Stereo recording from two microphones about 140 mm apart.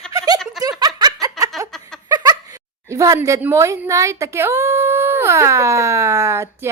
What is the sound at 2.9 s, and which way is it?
Speech, 20° right (ahead or behind).